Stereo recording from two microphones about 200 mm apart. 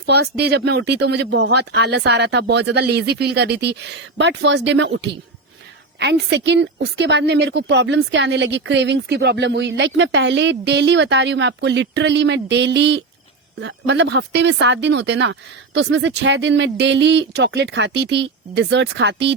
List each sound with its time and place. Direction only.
0.0 s a woman's voice: 55° right (ahead or behind)